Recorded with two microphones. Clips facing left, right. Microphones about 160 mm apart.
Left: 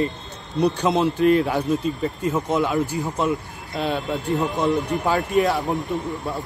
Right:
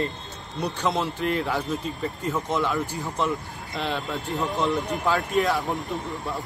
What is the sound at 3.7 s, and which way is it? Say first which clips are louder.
Speech: left 4 dB; 5° left (ahead or behind).